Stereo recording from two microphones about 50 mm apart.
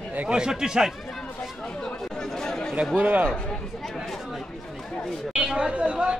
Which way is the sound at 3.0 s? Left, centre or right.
Right.